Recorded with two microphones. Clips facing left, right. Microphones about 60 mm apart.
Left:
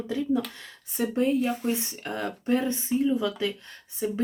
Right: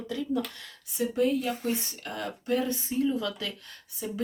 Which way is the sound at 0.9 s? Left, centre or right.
Left.